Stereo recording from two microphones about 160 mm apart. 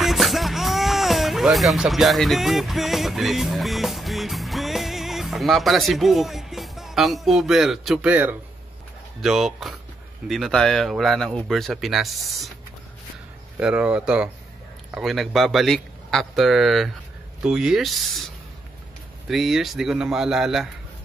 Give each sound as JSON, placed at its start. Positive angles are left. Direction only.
{"t": 0.0, "sound": "music", "side_deg": 0}
{"t": 9.2, "sound": "speech", "side_deg": 0}
{"t": 13.6, "sound": "speech", "side_deg": -5}